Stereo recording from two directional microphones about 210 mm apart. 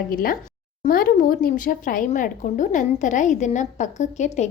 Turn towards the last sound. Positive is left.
turn(degrees=35)  # may be behind; listen again after turning